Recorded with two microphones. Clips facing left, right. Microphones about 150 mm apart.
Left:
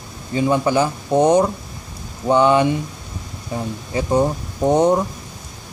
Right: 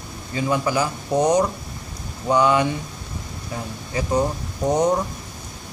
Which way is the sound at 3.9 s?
25° left (ahead or behind).